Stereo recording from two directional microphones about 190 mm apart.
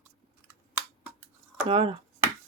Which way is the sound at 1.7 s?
30° right (ahead or behind).